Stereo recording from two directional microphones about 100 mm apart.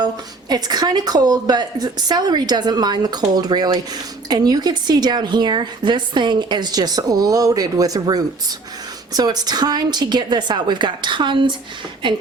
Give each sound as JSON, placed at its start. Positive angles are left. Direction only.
{"t": 0.0, "sound": "a woman's voice", "side_deg": -45}